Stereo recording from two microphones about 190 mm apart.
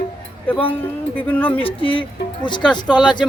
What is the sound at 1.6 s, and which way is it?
Music, 30° left (ahead or behind).